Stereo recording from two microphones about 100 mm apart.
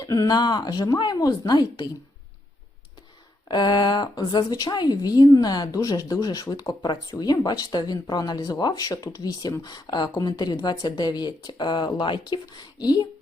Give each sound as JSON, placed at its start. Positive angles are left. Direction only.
{"t": 0.0, "sound": "a woman's voice", "side_deg": 35}
{"t": 3.5, "sound": "a woman's voice", "side_deg": 45}